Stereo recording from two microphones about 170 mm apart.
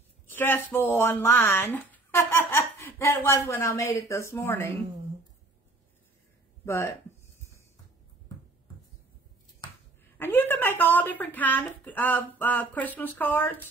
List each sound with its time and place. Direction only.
0.3 s speech: 10° left (ahead or behind)
6.6 s speech: 15° left (ahead or behind)
9.6 s finger snapping: 25° left (ahead or behind)
10.1 s speech: 10° left (ahead or behind)